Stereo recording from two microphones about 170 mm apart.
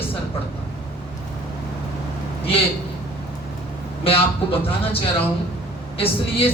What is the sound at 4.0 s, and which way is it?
Speech, 35° left (ahead or behind).